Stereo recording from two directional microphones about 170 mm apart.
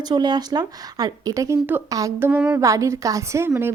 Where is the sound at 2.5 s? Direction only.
20° right (ahead or behind).